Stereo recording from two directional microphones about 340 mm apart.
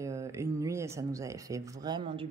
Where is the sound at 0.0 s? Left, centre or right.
Centre.